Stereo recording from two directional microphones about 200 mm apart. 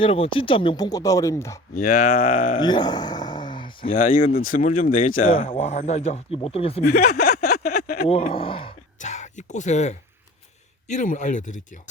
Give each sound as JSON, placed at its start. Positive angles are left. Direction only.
{"t": 0.0, "sound": "speech", "side_deg": 25}
{"t": 1.7, "sound": "speech", "side_deg": 45}
{"t": 2.6, "sound": "speech", "side_deg": 20}
{"t": 4.5, "sound": "speech", "side_deg": 40}
{"t": 5.2, "sound": "speech", "side_deg": 25}
{"t": 6.8, "sound": "a sound", "side_deg": 50}
{"t": 8.0, "sound": "speech", "side_deg": 30}
{"t": 9.0, "sound": "speech", "side_deg": 35}